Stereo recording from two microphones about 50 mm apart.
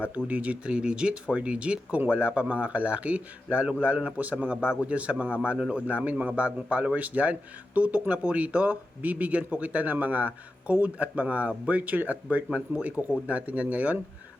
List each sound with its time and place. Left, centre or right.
0.3 s a man's voice: right
12.5 s speech: centre
12.8 s a man's voice: right